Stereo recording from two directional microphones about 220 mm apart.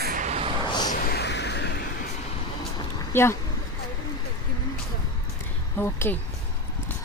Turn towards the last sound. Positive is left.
turn(degrees=10)  # may be behind; listen again after turning